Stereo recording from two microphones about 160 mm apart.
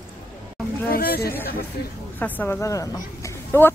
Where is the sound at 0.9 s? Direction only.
70° left (ahead or behind).